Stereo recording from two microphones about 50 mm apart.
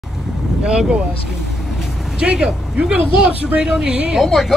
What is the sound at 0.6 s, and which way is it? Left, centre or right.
Speech, centre.